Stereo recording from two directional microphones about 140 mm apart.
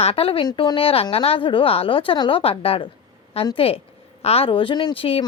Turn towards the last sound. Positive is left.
turn(degrees=40)  # may be behind; listen again after turning